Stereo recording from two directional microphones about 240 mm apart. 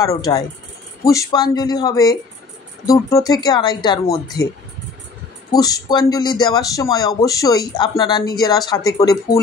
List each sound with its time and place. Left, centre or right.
0.0 s speech: centre
3.3 s speech: centre
5.5 s speech: centre